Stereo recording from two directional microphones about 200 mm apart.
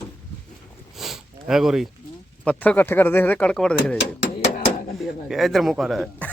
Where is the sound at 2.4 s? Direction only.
5° left (ahead or behind).